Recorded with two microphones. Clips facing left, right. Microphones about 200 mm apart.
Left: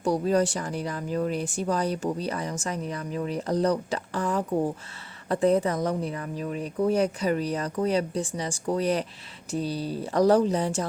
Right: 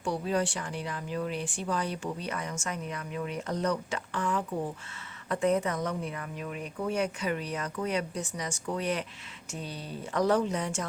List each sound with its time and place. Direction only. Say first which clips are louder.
0.0 s speech: left 6 dB; 40° left (ahead or behind)